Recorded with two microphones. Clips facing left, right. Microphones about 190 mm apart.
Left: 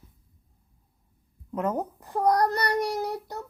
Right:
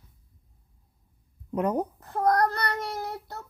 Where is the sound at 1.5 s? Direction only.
15° right (ahead or behind).